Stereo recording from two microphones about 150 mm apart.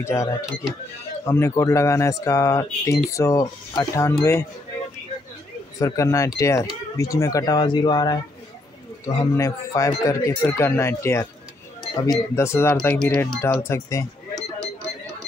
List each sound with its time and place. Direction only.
0.0 s speech: 20° left (ahead or behind)
5.8 s speech: 20° left (ahead or behind); by 13.4 s 5° left (ahead or behind)
13.4 s speech: 15° left (ahead or behind)